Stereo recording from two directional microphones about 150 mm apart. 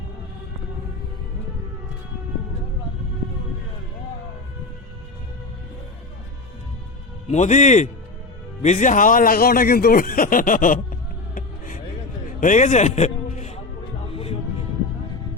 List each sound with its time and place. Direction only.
7.3 s a man's voice: 55° left (ahead or behind)
11.3 s a sound: 65° left (ahead or behind)
12.4 s music: 55° left (ahead or behind); by 14.3 s 40° left (ahead or behind)